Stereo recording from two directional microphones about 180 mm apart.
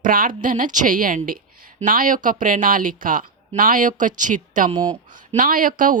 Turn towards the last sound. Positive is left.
turn(degrees=-50)  # may be behind; listen again after turning